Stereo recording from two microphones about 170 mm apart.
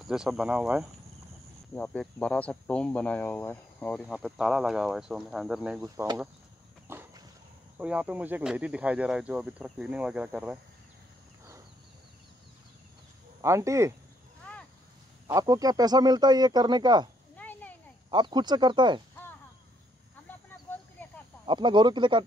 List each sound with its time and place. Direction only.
0.0 s speech: 5° right (ahead or behind)
1.7 s speech: 10° left (ahead or behind)
6.9 s a sound: 15° right (ahead or behind)
7.8 s speech: 10° right (ahead or behind)
13.4 s speech: 15° right (ahead or behind)
15.2 s speech: 20° right (ahead or behind)
17.4 s a sound: 10° left (ahead or behind)
18.1 s speech: 25° right (ahead or behind)
21.5 s speech: 25° right (ahead or behind)